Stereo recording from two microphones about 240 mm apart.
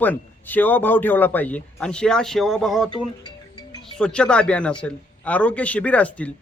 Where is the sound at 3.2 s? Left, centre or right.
Centre.